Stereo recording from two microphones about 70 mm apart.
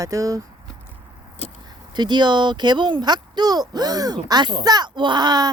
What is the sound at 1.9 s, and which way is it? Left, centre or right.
Speech, right.